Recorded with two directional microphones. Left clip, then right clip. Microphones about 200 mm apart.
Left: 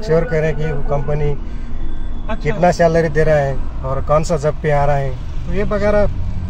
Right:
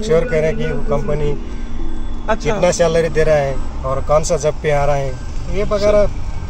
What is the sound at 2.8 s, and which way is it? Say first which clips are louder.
A man's voice: even; 15° left (ahead or behind).